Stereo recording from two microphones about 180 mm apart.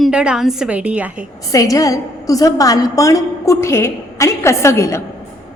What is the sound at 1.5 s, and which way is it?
A woman's voice, 20° left (ahead or behind).